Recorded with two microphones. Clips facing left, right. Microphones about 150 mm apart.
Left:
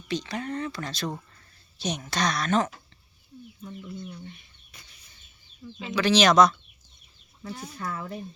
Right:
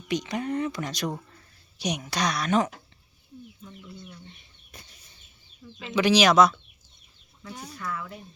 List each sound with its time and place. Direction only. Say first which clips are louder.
0.1 s speech: right 3 dB; 20° right (ahead or behind)
4.3 s a sound: left 3 dB; 30° right (ahead or behind)
5.9 s speech: right 1 dB; 15° right (ahead or behind)
7.8 s speech: even; 40° left (ahead or behind)